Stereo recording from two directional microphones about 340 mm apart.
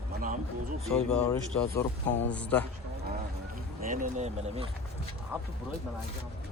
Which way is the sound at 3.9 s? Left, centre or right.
Right.